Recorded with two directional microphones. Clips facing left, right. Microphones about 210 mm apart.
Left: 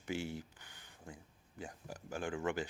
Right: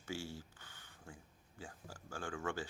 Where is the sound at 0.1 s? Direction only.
20° left (ahead or behind).